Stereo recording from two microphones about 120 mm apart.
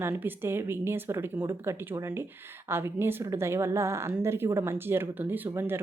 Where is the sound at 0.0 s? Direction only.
20° right (ahead or behind).